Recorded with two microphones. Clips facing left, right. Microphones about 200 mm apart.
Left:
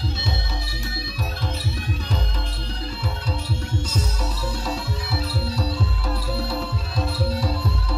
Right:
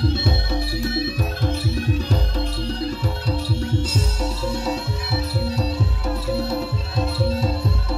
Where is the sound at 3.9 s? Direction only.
25° right (ahead or behind).